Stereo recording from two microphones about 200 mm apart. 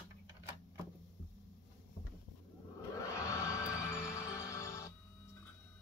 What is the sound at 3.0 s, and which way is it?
Music, 15° left (ahead or behind).